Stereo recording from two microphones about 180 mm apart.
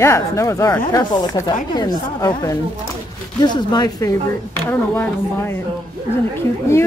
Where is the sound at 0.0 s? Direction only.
15° left (ahead or behind).